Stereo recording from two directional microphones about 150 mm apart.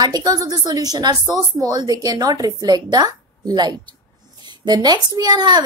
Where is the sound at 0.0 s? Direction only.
25° right (ahead or behind).